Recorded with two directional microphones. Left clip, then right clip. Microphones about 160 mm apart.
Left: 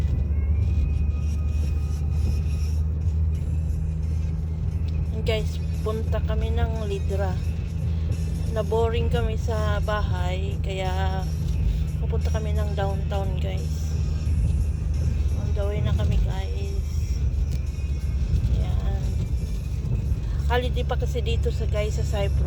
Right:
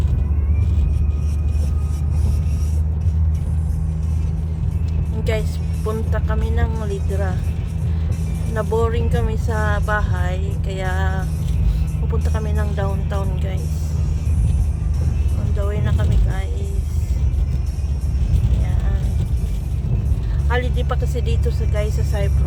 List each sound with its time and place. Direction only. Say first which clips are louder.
5.2 s speech: right 3 dB; 15° right (ahead or behind)
8.5 s speech: right 3 dB; 15° right (ahead or behind)
12.3 s speech: right 4 dB; 15° right (ahead or behind)
15.5 s vehicle: right 3 dB; 15° right (ahead or behind)
20.5 s speech: right 2 dB; 10° right (ahead or behind)